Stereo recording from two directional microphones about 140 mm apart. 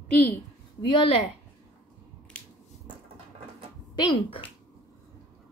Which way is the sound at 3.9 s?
35° left (ahead or behind).